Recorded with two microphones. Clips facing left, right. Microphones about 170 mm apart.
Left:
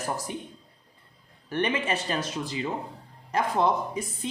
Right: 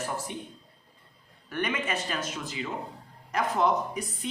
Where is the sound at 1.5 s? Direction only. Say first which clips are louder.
Left 3 dB; 30° left (ahead or behind).